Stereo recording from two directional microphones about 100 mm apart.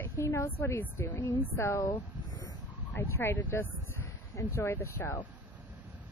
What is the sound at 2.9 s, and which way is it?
A woman's voice, 25° left (ahead or behind).